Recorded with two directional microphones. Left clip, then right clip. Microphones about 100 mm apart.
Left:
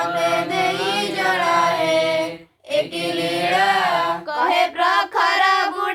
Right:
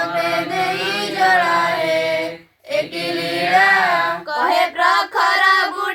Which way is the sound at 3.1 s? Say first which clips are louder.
Right 5 dB; 40° left (ahead or behind).